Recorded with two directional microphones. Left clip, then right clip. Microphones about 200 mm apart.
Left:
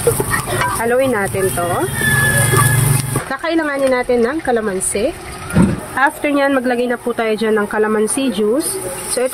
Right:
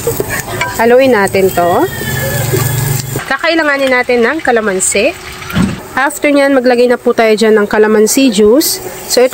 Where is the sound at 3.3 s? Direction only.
25° right (ahead or behind).